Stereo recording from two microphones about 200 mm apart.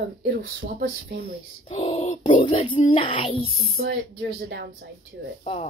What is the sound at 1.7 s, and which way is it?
Speech, 30° left (ahead or behind).